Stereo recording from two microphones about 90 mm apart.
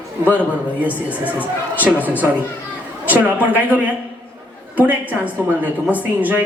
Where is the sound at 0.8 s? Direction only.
15° right (ahead or behind).